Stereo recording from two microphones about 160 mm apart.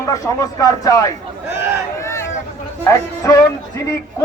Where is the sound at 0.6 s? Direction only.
20° left (ahead or behind).